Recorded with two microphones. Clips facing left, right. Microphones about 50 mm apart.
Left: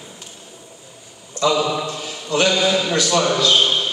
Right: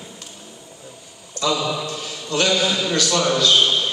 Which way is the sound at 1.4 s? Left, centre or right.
Left.